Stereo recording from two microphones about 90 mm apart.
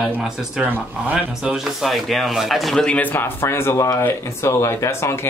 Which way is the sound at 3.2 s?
30° left (ahead or behind).